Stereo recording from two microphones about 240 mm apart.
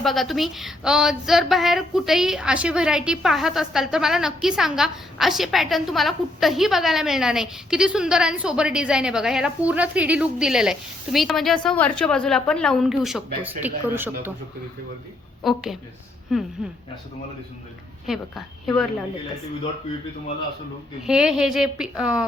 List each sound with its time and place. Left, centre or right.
0.0 s speech: centre
15.4 s speech: centre
18.0 s a woman's voice: centre
21.1 s speech: centre